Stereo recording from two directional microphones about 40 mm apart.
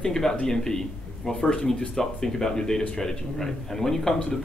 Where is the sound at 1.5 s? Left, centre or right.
Left.